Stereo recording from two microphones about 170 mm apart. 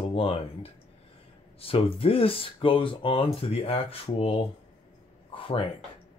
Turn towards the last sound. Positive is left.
turn(degrees=30)  # may be behind; listen again after turning